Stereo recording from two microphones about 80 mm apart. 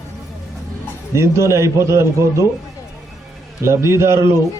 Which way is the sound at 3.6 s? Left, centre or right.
Right.